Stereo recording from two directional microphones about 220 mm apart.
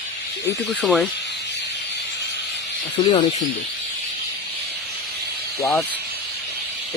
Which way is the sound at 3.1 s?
20° left (ahead or behind).